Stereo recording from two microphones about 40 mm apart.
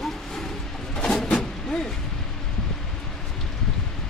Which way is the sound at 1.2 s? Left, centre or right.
Left.